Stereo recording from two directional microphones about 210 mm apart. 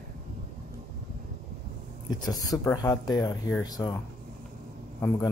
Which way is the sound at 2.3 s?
15° left (ahead or behind).